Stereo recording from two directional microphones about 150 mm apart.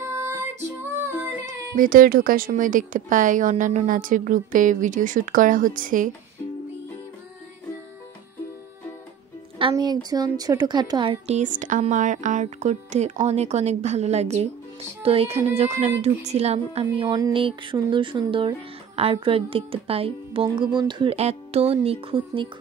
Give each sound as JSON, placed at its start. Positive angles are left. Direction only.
{"t": 0.0, "sound": "music", "side_deg": -15}
{"t": 1.8, "sound": "a woman's voice", "side_deg": -70}
{"t": 9.6, "sound": "speech", "side_deg": -35}
{"t": 11.2, "sound": "a woman's voice", "side_deg": -55}